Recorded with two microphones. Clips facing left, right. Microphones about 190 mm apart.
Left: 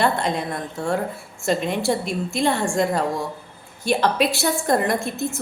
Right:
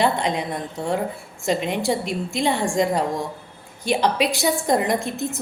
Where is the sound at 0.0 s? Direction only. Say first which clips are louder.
Even; 15° right (ahead or behind).